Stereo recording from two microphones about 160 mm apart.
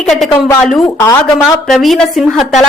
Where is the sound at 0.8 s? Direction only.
20° left (ahead or behind).